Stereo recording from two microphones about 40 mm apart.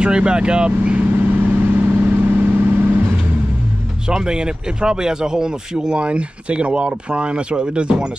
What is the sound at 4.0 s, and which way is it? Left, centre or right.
Speech, centre.